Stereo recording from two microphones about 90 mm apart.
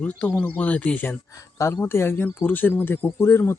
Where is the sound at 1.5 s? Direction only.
30° left (ahead or behind).